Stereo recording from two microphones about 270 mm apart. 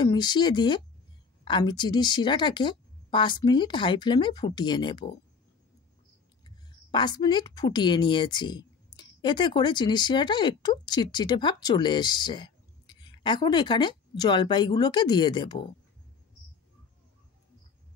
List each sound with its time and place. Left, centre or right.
0.0 s a woman's voice: centre
6.4 s a woman's voice: centre